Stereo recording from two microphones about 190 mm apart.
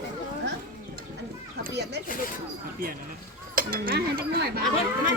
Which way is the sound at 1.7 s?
60° right (ahead or behind).